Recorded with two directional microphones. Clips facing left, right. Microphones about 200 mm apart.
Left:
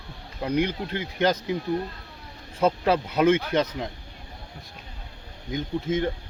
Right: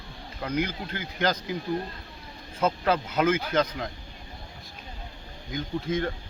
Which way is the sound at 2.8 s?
30° left (ahead or behind).